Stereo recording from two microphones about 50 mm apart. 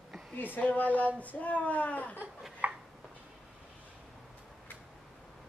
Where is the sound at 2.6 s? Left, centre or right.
Right.